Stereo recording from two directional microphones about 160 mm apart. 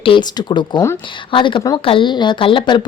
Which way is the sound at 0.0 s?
30° left (ahead or behind).